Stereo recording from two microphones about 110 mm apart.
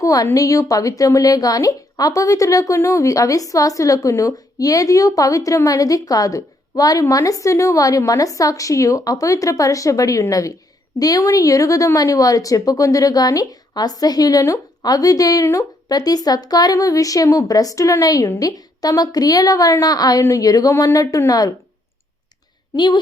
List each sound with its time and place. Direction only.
0.0 s a woman's voice: 35° left (ahead or behind)
22.7 s a woman's voice: 40° left (ahead or behind)